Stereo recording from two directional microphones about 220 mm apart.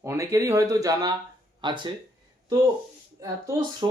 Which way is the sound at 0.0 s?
15° right (ahead or behind).